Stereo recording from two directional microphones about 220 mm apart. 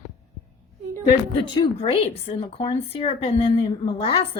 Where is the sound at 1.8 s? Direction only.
25° left (ahead or behind).